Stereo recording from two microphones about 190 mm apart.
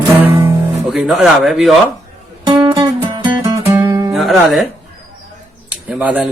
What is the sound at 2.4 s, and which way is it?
Music, 25° right (ahead or behind).